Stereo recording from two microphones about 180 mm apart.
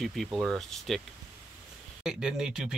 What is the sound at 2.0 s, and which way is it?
Speech, 5° right (ahead or behind).